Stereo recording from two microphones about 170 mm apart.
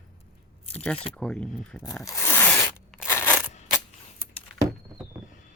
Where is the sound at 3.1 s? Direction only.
15° left (ahead or behind).